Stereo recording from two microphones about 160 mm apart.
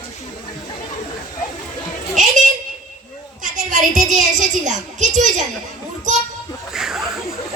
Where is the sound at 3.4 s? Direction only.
50° right (ahead or behind).